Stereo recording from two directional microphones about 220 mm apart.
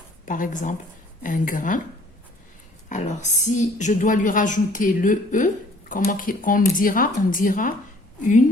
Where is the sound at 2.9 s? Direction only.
30° left (ahead or behind).